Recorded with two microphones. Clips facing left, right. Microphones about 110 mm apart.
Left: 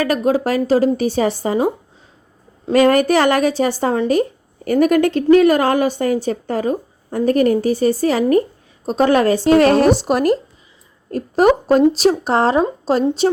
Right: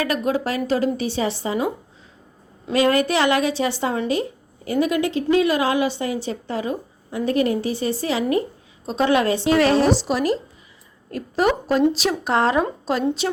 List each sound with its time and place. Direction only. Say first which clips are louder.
0.0 s a woman's voice: left 5 dB; 40° left (ahead or behind)
2.7 s a woman's voice: left 6 dB; 45° left (ahead or behind)